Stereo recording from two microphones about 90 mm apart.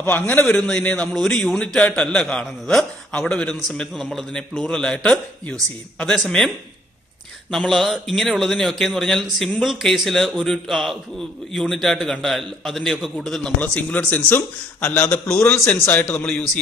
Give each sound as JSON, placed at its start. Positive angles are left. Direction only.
{"t": 0.0, "sound": "a man's voice", "side_deg": 25}
{"t": 0.6, "sound": "a man's voice", "side_deg": 10}
{"t": 1.1, "sound": "a man's voice", "side_deg": 5}
{"t": 7.5, "sound": "a man's voice", "side_deg": 5}